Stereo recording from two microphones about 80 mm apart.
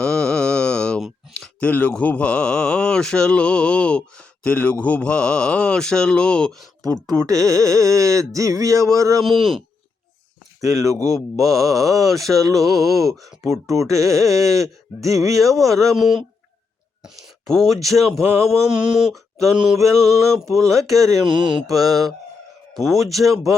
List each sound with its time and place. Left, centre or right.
0.0 s mantra: centre
1.6 s speech: centre
6.8 s speech: right
10.6 s speech: right
15.9 s a sound: centre
17.4 s speech: centre
17.8 s a sound: centre
20.7 s speech: right
21.2 s mantra: right
21.7 s speech: right
22.7 s a sound: centre